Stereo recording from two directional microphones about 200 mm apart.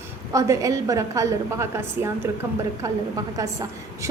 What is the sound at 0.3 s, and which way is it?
A woman's voice, 15° right (ahead or behind).